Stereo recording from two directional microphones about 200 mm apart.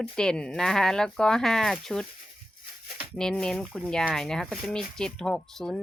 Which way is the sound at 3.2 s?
5° left (ahead or behind).